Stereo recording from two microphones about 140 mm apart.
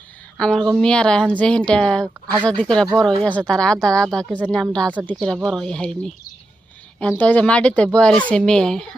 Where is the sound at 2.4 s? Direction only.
5° left (ahead or behind).